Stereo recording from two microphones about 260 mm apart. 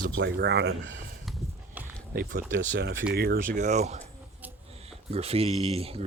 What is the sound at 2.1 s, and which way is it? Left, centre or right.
Speech, right.